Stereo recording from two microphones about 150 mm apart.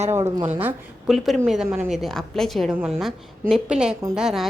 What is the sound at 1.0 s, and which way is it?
A woman's voice, centre (ahead or behind).